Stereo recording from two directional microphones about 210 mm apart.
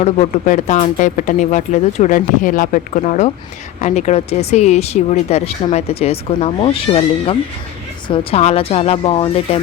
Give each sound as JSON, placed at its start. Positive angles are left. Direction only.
{"t": 0.0, "sound": "speech", "side_deg": 35}